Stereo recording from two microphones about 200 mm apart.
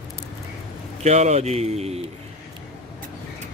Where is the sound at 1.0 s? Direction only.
35° right (ahead or behind).